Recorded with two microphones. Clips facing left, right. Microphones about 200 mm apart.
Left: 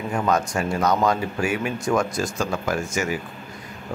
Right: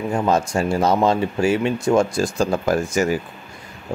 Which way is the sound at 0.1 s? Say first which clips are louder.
Right 3 dB; 25° right (ahead or behind).